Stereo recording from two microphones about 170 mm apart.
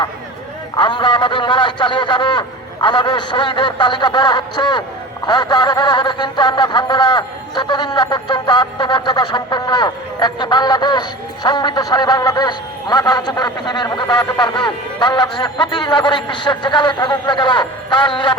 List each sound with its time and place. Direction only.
0.8 s a man's voice: 30° left (ahead or behind)